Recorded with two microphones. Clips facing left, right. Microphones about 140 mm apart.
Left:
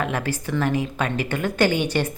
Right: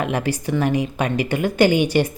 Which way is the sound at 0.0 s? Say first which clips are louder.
Right 3 dB; 15° right (ahead or behind).